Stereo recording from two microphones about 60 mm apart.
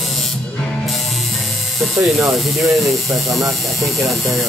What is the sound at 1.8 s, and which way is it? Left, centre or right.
Speech, centre.